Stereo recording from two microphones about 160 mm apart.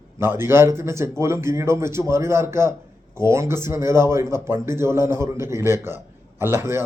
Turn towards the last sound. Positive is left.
turn(degrees=-15)  # may be behind; listen again after turning